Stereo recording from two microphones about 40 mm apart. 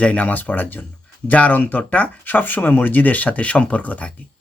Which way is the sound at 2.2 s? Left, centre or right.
Left.